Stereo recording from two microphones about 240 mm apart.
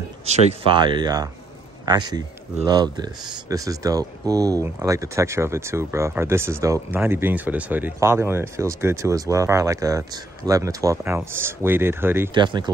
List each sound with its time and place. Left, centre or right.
0.2 s speech: right